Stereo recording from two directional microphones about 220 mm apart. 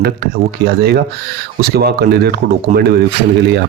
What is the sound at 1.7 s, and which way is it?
Speech, 45° right (ahead or behind).